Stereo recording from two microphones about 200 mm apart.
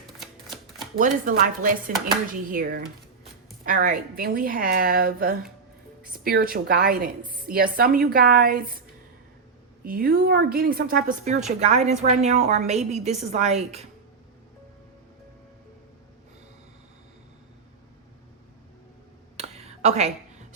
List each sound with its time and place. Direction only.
0.2 s typewriter: centre (ahead or behind)
0.9 s a woman's voice: 40° right (ahead or behind)
9.8 s a woman's voice: 45° right (ahead or behind)
19.4 s a sound: 35° right (ahead or behind)